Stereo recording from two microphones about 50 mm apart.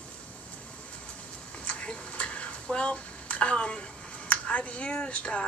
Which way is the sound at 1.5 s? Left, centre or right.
Left.